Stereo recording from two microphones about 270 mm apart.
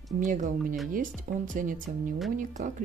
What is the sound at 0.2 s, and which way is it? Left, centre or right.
Speech, right.